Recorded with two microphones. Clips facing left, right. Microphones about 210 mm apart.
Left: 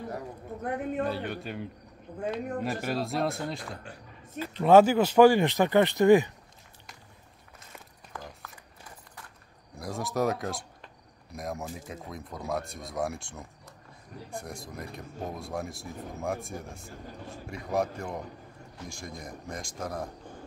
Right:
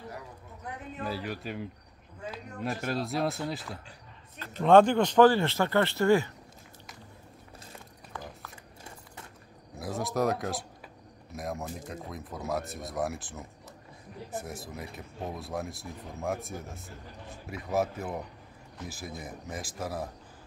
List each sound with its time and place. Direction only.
0.6 s speech: 55° left (ahead or behind)
1.0 s speech: centre (ahead or behind); by 6.3 s 15° left (ahead or behind)
9.8 s speech: centre (ahead or behind)